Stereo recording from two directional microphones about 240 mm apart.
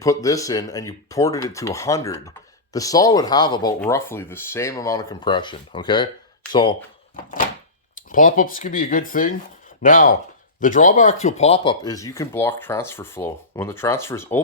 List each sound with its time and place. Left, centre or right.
0.0 s speech: centre
8.1 s speech: left; by 14.4 s centre